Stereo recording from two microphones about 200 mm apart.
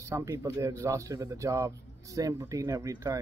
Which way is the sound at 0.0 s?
15° right (ahead or behind).